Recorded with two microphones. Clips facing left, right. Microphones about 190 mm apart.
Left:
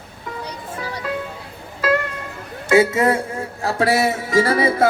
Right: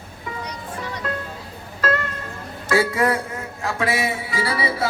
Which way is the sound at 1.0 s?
10° left (ahead or behind).